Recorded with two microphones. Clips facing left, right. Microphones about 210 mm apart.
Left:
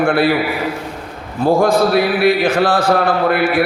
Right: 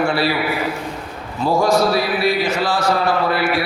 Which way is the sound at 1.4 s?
55° left (ahead or behind).